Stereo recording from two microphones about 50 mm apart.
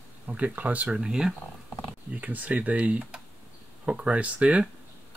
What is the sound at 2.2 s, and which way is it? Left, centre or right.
Speech, right.